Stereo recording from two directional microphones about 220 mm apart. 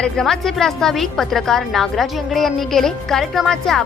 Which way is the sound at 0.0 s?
Centre (ahead or behind).